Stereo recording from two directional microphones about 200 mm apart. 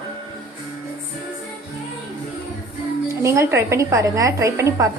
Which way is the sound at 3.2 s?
15° right (ahead or behind).